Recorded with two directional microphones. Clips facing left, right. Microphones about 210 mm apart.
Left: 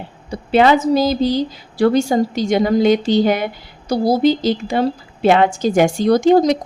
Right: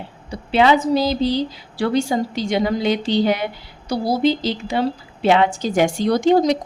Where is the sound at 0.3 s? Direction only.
50° left (ahead or behind).